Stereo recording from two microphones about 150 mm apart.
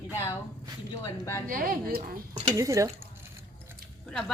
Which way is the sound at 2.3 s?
25° right (ahead or behind).